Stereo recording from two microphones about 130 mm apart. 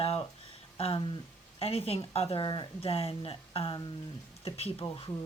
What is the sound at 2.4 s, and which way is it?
Speech, 35° left (ahead or behind).